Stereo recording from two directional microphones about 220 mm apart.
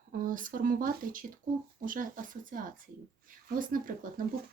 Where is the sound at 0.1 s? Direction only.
35° right (ahead or behind).